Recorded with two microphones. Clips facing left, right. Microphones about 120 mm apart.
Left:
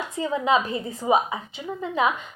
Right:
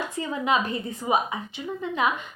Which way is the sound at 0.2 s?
25° left (ahead or behind).